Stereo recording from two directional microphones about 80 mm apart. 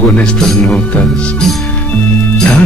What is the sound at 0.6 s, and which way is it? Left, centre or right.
Speech, centre.